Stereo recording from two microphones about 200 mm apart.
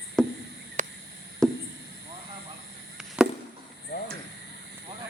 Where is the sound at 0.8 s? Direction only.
40° right (ahead or behind).